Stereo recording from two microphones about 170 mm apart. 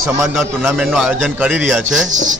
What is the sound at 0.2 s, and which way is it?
A man's voice, 5° right (ahead or behind).